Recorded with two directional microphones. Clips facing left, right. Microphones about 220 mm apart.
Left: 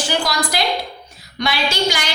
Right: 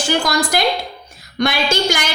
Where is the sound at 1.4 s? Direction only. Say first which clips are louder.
Right 3 dB; 50° right (ahead or behind).